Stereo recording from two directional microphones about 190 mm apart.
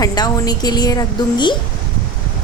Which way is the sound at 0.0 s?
20° left (ahead or behind).